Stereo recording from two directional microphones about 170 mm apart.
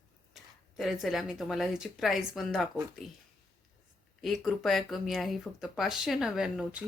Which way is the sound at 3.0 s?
40° right (ahead or behind).